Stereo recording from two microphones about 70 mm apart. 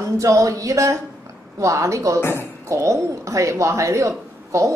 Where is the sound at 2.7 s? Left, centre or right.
Right.